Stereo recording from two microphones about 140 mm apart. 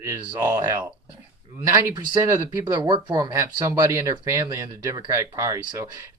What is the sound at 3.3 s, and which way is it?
Speech, 20° right (ahead or behind).